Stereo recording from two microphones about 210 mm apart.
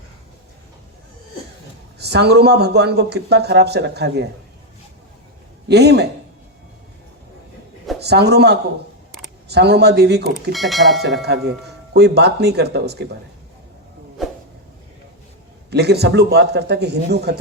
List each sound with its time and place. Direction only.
2.0 s speech: 50° right (ahead or behind)
5.6 s speech: 50° right (ahead or behind)
8.0 s speech: 50° right (ahead or behind)
10.5 s speech: centre (ahead or behind)
11.0 s speech: 50° right (ahead or behind)
14.2 s a sound: centre (ahead or behind)
15.7 s speech: 50° right (ahead or behind)